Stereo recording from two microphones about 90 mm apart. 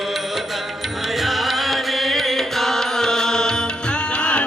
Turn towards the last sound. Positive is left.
turn(degrees=10)  # may be behind; listen again after turning